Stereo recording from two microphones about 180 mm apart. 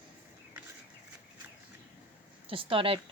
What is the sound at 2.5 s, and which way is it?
Speech, 30° right (ahead or behind).